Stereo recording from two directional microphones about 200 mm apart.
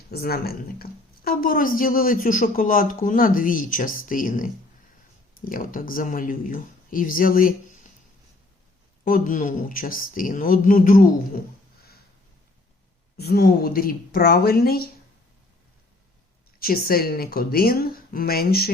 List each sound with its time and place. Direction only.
0.1 s speech: 50° left (ahead or behind)
5.5 s speech: 45° left (ahead or behind)
9.0 s speech: 45° left (ahead or behind)
13.1 s speech: 50° left (ahead or behind)
16.6 s speech: 50° left (ahead or behind)